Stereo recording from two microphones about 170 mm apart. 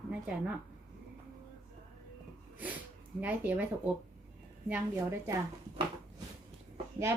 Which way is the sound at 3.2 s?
10° right (ahead or behind).